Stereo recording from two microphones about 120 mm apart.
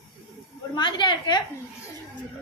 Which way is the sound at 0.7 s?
40° left (ahead or behind).